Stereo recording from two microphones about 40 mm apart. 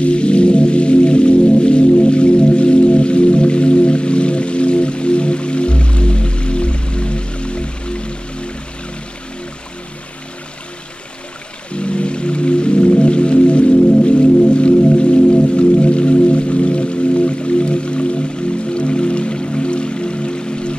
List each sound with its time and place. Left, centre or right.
0.0 s music: left
11.7 s music: left